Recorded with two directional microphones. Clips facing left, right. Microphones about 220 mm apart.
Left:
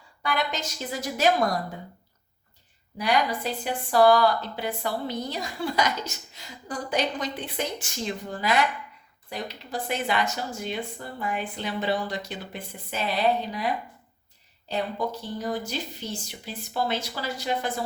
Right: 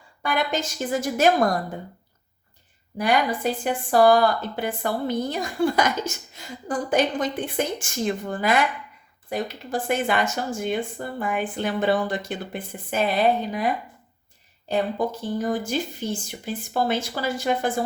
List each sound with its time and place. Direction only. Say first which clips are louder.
0.2 s a woman's voice: right 4 dB; 50° right (ahead or behind)
3.0 s a woman's voice: right 3 dB; 50° right (ahead or behind)
14.7 s a woman's voice: right 5 dB; 50° right (ahead or behind)